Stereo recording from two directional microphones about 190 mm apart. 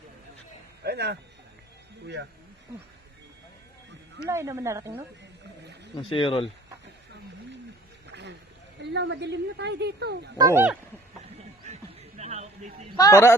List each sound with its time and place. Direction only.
0.8 s speech: 60° right (ahead or behind)
4.3 s a woman's voice: 15° right (ahead or behind)
6.0 s speech: 25° left (ahead or behind)
8.1 s a sound: 65° right (ahead or behind)
8.8 s speech: 65° right (ahead or behind)
10.3 s a woman's voice: 15° right (ahead or behind)
11.6 s music: 35° right (ahead or behind)
13.0 s a man's voice: 15° left (ahead or behind)